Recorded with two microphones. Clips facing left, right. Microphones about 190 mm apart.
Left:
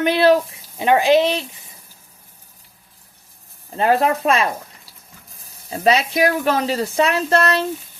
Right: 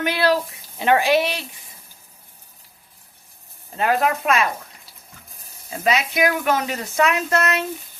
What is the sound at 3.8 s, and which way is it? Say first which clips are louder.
Speech: left 3 dB; 30° left (ahead or behind).